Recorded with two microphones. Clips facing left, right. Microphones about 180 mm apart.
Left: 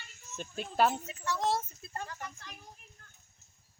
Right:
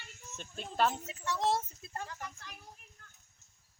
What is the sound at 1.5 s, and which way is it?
Speech, 10° right (ahead or behind).